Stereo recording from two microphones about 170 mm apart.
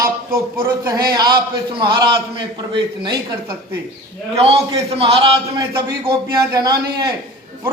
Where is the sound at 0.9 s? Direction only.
20° right (ahead or behind).